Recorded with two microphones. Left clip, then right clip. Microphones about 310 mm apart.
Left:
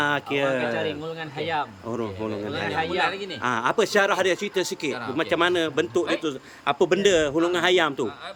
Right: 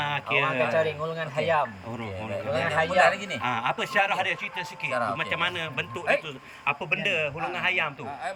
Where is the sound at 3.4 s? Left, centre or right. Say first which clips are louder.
Left 6 dB; centre.